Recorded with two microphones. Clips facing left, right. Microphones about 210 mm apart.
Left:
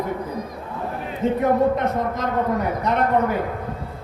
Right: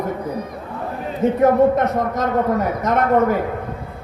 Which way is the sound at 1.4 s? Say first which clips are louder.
Right 5 dB; 45° right (ahead or behind).